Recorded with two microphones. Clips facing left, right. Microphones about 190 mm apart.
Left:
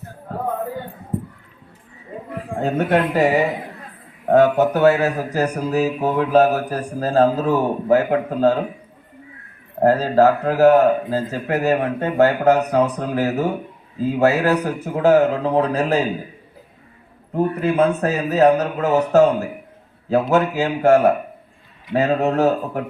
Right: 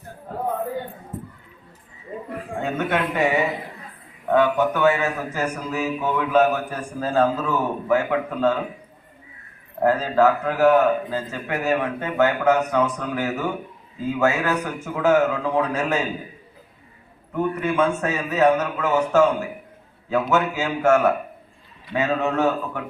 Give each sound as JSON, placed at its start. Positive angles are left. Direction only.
{"t": 2.6, "sound": "speech", "side_deg": 35}
{"t": 9.8, "sound": "speech", "side_deg": 35}
{"t": 17.3, "sound": "speech", "side_deg": 35}
{"t": 20.5, "sound": "speech", "side_deg": 35}